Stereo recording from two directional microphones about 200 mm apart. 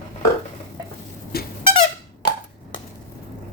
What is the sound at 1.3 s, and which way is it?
Squeak, 50° left (ahead or behind).